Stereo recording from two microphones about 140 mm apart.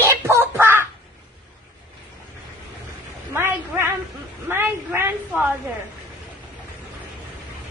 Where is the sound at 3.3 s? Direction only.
15° right (ahead or behind).